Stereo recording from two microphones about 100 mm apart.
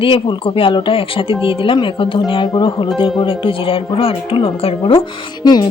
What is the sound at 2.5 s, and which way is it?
Music, 55° left (ahead or behind).